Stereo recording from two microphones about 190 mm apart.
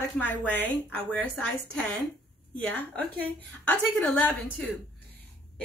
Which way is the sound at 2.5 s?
5° left (ahead or behind).